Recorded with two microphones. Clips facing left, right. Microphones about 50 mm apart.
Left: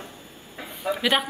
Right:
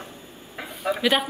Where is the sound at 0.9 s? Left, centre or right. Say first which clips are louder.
Right 1 dB; centre.